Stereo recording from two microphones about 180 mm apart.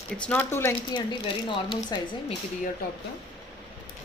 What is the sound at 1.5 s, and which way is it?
Speech, 25° left (ahead or behind).